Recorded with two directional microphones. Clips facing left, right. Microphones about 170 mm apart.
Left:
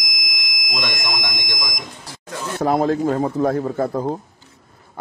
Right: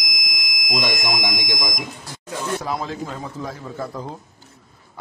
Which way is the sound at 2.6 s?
50° left (ahead or behind).